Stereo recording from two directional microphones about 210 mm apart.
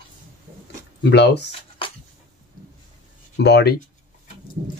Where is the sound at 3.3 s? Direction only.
55° left (ahead or behind).